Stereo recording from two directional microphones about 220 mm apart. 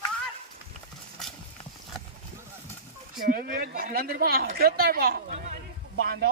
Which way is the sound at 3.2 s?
40° right (ahead or behind).